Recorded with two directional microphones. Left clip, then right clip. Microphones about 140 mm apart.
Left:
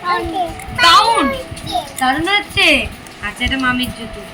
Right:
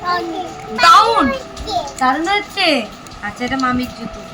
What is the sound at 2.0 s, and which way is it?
Speech, 30° right (ahead or behind).